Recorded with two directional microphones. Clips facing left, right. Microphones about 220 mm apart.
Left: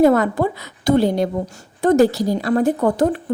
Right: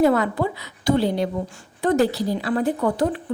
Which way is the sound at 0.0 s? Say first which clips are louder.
Left 4 dB; 45° left (ahead or behind).